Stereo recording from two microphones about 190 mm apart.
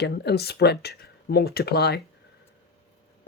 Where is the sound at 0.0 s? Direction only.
60° left (ahead or behind).